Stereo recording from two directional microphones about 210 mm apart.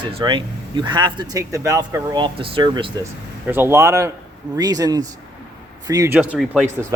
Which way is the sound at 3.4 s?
10° right (ahead or behind).